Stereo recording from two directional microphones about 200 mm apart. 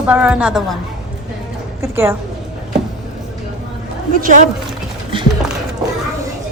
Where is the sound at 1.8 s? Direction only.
15° right (ahead or behind).